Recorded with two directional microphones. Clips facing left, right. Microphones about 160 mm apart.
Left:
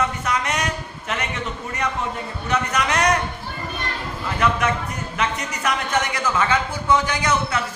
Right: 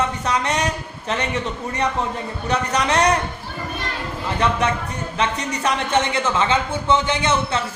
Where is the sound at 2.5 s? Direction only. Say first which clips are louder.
Right 2 dB; 30° right (ahead or behind).